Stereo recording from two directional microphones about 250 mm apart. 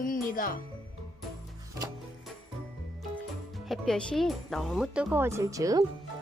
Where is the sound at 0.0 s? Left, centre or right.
Left.